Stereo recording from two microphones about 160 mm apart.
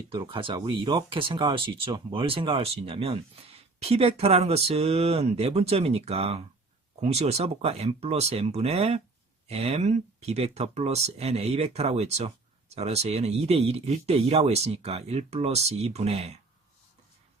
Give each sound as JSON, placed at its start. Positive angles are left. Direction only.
{"t": 0.1, "sound": "speech", "side_deg": -30}